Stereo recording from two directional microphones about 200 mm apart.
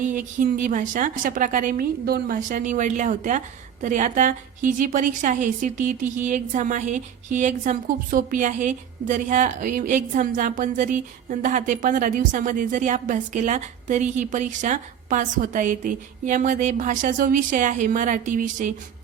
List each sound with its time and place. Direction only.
0.0 s a woman's voice: 40° right (ahead or behind)